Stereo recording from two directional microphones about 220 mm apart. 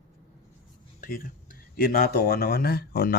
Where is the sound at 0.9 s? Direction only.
40° left (ahead or behind).